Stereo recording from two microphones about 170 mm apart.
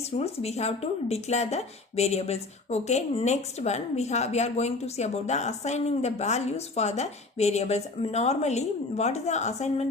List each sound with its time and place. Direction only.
0.0 s speech: 40° left (ahead or behind)